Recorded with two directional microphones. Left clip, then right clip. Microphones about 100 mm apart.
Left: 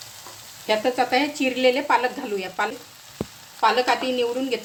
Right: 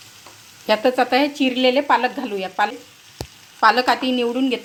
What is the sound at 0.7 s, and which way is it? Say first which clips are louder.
Speech: right 4 dB; 65° right (ahead or behind).